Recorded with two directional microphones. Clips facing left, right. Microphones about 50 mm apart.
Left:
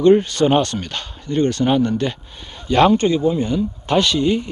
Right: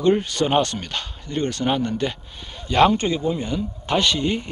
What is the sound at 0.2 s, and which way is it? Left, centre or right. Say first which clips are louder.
Speech: left 4 dB; centre.